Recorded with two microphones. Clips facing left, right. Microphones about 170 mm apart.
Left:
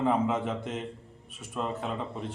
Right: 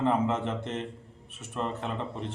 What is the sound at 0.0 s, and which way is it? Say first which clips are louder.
A woman's voice: even; 5° left (ahead or behind).